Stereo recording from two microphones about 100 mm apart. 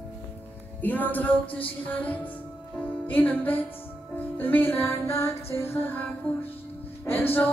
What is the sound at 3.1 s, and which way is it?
Music, 15° left (ahead or behind).